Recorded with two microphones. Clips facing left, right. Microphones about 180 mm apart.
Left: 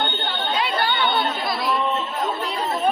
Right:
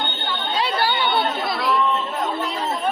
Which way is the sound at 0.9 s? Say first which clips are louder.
Right 1 dB; 5° right (ahead or behind).